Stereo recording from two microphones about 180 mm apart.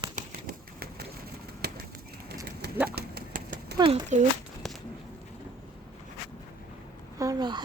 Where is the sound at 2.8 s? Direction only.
60° right (ahead or behind).